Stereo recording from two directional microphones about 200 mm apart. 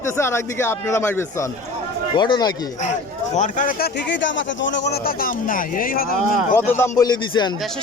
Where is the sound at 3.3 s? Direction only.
40° left (ahead or behind).